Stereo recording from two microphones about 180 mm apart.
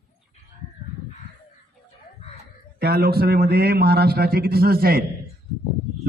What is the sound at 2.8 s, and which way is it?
A man's voice, 60° right (ahead or behind).